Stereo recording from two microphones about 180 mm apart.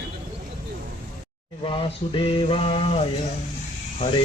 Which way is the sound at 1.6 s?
30° left (ahead or behind).